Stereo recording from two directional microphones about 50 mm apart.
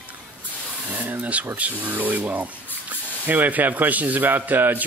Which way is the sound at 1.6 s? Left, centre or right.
Right.